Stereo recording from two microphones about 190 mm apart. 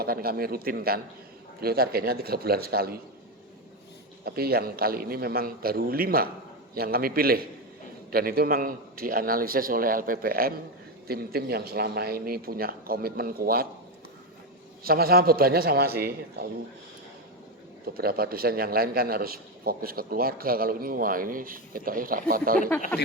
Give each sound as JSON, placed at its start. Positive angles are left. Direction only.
{"t": 0.0, "sound": "a man's voice", "side_deg": -50}
{"t": 4.3, "sound": "a man's voice", "side_deg": -55}
{"t": 14.8, "sound": "a man's voice", "side_deg": -50}
{"t": 17.8, "sound": "a man's voice", "side_deg": -50}